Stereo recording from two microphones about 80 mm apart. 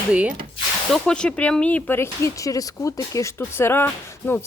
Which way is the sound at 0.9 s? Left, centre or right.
Centre.